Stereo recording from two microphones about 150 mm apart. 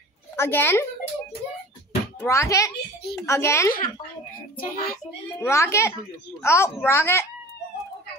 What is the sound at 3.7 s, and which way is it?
A child's voice, 70° left (ahead or behind).